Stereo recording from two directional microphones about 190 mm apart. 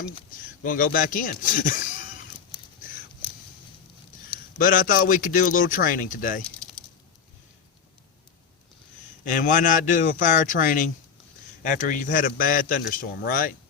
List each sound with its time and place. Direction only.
0.6 s speech: 45° left (ahead or behind)
4.5 s a man's voice: 45° left (ahead or behind)
9.2 s a man's voice: 40° left (ahead or behind)